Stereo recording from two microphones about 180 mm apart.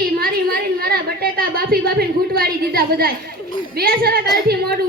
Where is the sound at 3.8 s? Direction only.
60° right (ahead or behind).